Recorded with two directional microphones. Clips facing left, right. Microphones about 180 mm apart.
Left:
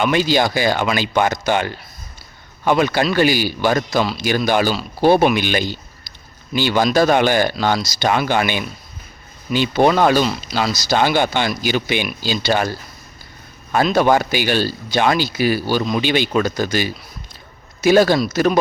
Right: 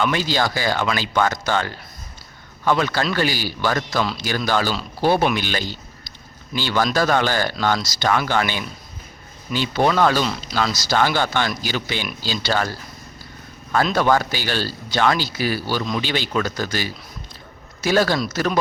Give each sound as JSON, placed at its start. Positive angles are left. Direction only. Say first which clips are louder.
{"t": 0.0, "sound": "speech", "louder": "left 4 dB", "side_deg": 15}
{"t": 10.2, "sound": "speech", "louder": "left 2 dB", "side_deg": 5}
{"t": 13.9, "sound": "speech", "louder": "left 5 dB", "side_deg": 15}